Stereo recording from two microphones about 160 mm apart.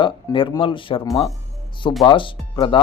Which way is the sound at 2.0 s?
30° left (ahead or behind).